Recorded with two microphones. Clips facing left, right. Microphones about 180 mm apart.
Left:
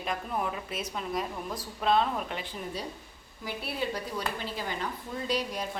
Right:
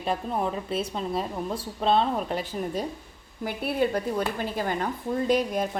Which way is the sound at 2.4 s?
45° right (ahead or behind).